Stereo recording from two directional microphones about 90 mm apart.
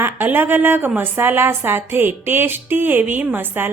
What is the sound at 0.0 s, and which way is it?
A woman's voice, 20° right (ahead or behind).